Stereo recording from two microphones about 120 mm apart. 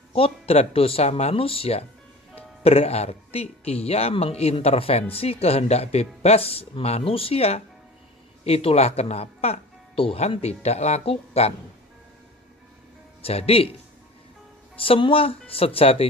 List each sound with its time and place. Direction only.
0.1 s speech: 55° left (ahead or behind)
13.2 s speech: 55° left (ahead or behind)
14.8 s speech: 50° left (ahead or behind)